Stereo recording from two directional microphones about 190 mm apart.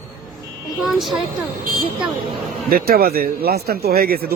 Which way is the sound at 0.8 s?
Centre (ahead or behind).